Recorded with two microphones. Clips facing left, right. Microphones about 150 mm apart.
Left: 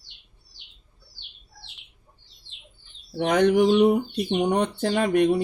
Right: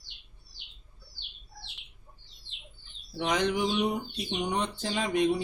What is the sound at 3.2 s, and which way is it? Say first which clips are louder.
Speech: left 9 dB; 60° left (ahead or behind).